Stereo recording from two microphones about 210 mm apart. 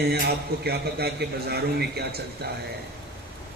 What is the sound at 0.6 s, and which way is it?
A man's voice, 50° right (ahead or behind).